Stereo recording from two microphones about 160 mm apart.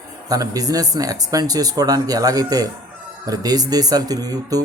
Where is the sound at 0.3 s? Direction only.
20° right (ahead or behind).